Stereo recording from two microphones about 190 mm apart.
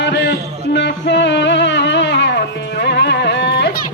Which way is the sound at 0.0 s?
60° left (ahead or behind).